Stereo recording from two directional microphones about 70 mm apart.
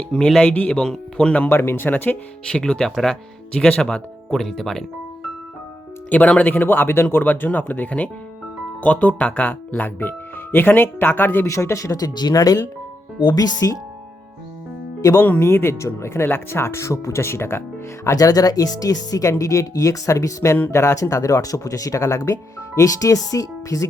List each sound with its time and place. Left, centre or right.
0.1 s speech: centre
0.5 s speech: left
0.8 s speech: centre
1.5 s speech: left
2.4 s speech: centre
6.1 s speech: centre
11.4 s speech: left
12.3 s speech: left
13.1 s speech: left
15.2 s speech: left
18.2 s speech: left